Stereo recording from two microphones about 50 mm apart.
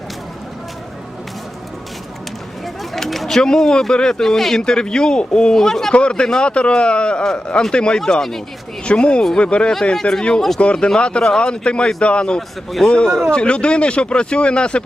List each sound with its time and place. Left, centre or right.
2.9 s speech: centre
5.9 s speech: left
8.8 s speech: left
12.4 s a man's voice: centre
13.3 s speech: left